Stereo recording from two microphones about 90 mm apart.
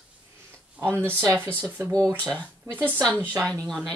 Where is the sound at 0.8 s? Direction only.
15° left (ahead or behind).